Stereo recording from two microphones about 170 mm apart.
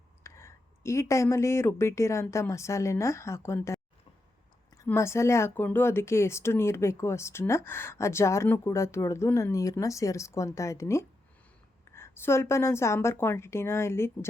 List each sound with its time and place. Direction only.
0.2 s speech: 15° left (ahead or behind)
4.9 s speech: 15° left (ahead or behind)